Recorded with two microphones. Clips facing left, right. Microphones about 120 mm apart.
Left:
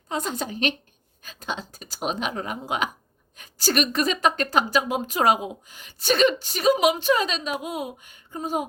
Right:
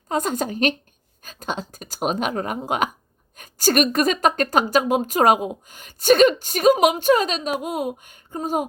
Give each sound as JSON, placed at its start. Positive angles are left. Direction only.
{"t": 0.1, "sound": "a woman's voice", "side_deg": -45}